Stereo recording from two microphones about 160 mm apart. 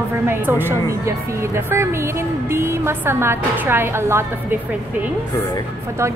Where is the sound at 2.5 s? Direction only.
15° right (ahead or behind).